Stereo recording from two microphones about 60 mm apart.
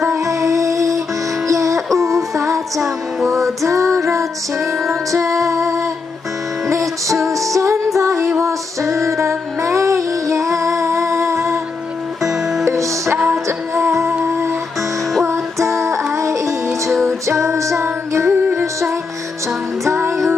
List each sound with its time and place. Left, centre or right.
0.0 s music: right
3.6 s music: right
5.5 s a sound: right
6.7 s music: right
8.4 s female singing: right
12.2 s music: centre
12.6 s music: right
15.2 s music: right
19.8 s music: right